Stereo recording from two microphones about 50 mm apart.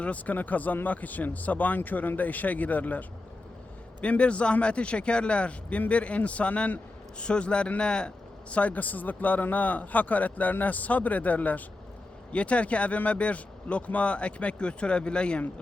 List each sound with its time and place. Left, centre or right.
0.0 s a man's voice: left
4.0 s a man's voice: left